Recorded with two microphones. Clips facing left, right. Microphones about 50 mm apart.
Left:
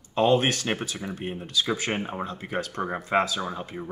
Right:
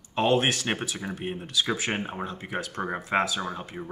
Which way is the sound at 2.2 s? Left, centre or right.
Right.